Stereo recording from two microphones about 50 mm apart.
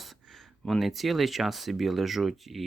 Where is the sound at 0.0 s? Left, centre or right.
Centre.